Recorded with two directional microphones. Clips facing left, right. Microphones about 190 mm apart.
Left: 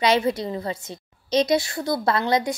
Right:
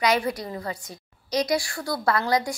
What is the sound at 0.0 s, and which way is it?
Speech, 25° left (ahead or behind).